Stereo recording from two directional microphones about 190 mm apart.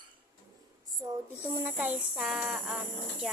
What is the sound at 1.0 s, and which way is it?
A woman's voice, 20° right (ahead or behind).